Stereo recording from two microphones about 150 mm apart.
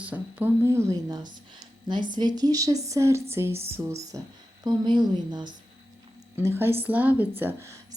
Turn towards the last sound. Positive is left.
turn(degrees=-20)  # may be behind; listen again after turning